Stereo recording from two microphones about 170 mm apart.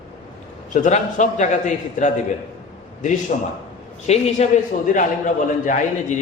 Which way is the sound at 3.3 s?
45° left (ahead or behind).